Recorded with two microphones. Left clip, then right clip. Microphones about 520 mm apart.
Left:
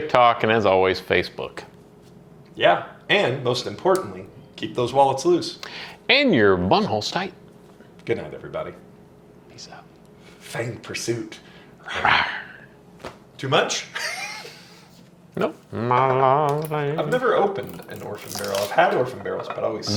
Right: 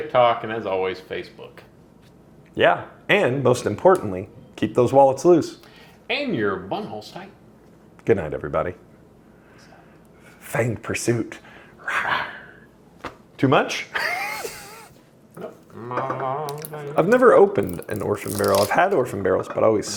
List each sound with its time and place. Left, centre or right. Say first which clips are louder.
0.1 s speech: left 2 dB; left
2.6 s speech: even; right
5.5 s speech: left 11 dB; left
8.0 s speech: right 6 dB; right
10.4 s speech: right 6 dB; right
12.0 s speech: left 9 dB; left
13.4 s speech: right 2 dB; right
15.7 s speech: left 7 dB; left
16.9 s speech: right 8 dB; right